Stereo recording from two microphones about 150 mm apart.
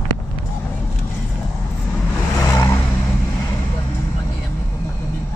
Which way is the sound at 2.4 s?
20° left (ahead or behind).